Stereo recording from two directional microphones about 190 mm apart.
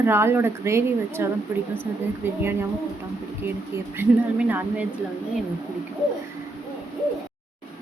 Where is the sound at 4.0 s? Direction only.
10° right (ahead or behind).